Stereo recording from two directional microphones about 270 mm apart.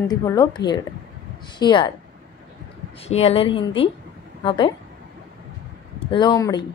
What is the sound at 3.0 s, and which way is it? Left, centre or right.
A woman's voice, left.